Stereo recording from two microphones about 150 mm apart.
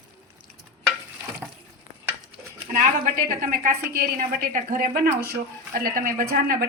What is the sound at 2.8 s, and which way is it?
A woman's voice, 65° right (ahead or behind).